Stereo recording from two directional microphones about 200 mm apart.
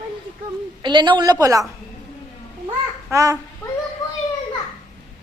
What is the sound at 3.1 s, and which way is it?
Speech, 15° right (ahead or behind).